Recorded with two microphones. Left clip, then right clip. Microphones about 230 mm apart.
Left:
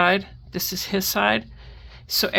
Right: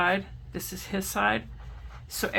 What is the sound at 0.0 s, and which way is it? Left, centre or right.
Speech, left.